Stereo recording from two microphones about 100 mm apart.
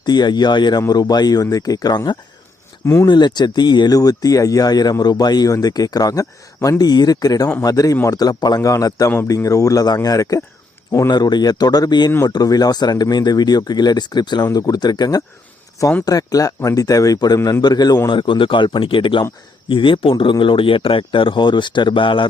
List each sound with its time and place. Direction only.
0.0 s speech: 45° left (ahead or behind)
2.8 s speech: 30° left (ahead or behind)
3.1 s speech: 50° left (ahead or behind)
18.1 s speech: 55° left (ahead or behind)